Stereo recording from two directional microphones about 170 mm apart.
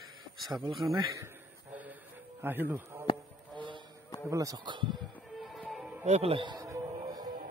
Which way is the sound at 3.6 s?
30° right (ahead or behind).